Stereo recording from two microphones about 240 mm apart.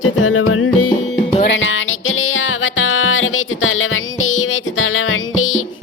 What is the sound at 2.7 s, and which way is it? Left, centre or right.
Music, left.